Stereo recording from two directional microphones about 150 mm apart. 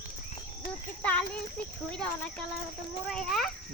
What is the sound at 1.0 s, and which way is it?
Speech, 10° left (ahead or behind).